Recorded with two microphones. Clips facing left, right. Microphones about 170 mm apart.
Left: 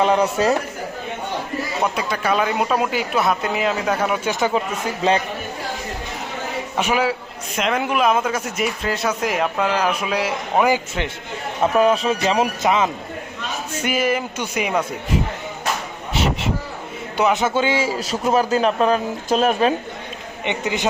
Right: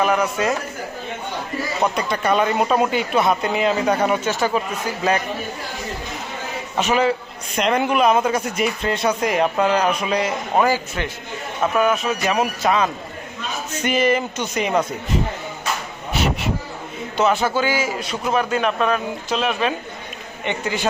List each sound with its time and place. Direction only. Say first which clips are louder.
0.0 s a man's voice: left 2 dB; 30° left (ahead or behind)
1.8 s a man's voice: right 2 dB; 5° left (ahead or behind)
4.3 s speech: even; 20° left (ahead or behind)
6.7 s a man's voice: right 2 dB; 10° left (ahead or behind)
10.6 s speech: left 1 dB; 20° left (ahead or behind)
13.8 s speech: right 2 dB; 5° left (ahead or behind)
17.2 s a man's voice: even; 15° left (ahead or behind)
19.3 s speech: left 5 dB; 45° left (ahead or behind)
20.4 s speech: left 1 dB; 20° left (ahead or behind)